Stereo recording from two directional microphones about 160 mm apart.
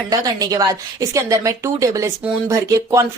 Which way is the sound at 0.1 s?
25° right (ahead or behind).